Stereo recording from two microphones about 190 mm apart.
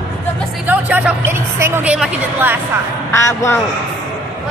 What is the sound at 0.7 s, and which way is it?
Speech, 10° right (ahead or behind).